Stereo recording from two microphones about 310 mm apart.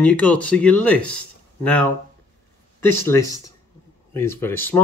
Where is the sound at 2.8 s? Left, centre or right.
Centre.